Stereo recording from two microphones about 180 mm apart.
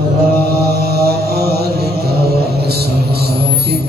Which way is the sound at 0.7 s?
60° right (ahead or behind).